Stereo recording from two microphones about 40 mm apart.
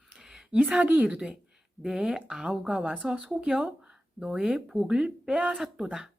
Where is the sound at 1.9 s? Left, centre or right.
Centre.